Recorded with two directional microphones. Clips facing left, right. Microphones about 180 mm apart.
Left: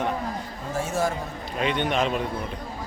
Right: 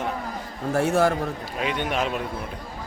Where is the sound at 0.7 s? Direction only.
60° right (ahead or behind).